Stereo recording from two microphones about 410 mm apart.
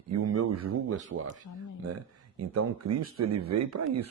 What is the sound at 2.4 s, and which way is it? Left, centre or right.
Speech, right.